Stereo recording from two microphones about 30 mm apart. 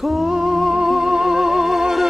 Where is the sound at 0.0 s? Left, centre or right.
Centre.